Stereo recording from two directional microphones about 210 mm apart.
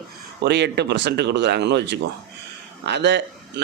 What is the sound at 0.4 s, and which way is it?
A man's voice, 55° right (ahead or behind).